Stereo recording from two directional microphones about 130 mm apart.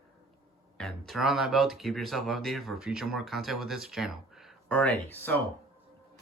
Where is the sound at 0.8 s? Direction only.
Centre (ahead or behind).